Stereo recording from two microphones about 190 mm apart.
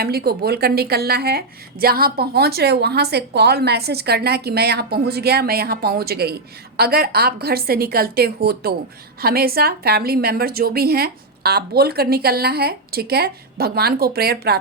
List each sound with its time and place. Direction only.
0.0 s a woman's voice: 55° right (ahead or behind)